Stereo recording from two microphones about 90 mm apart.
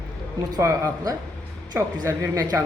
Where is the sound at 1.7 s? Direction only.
25° right (ahead or behind).